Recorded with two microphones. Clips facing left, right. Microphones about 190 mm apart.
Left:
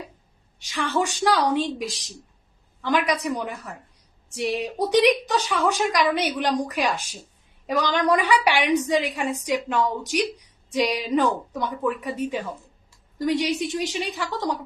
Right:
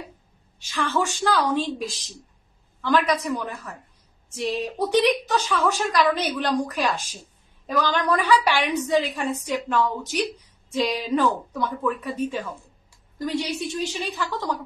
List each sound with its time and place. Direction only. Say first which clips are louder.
0.6 s a woman's voice: even; 15° left (ahead or behind)